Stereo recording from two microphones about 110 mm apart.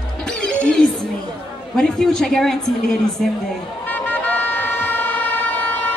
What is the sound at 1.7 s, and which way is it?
Speech, 5° left (ahead or behind).